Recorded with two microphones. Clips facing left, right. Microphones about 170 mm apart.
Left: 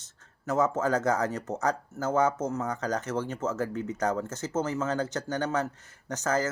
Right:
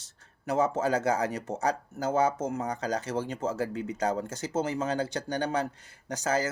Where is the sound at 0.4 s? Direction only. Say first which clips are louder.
Even; 10° right (ahead or behind).